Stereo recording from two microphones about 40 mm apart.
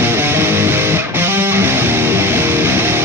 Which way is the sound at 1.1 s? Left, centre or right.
Right.